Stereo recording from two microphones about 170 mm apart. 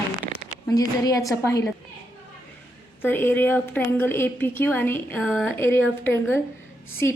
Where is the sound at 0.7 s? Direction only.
20° left (ahead or behind).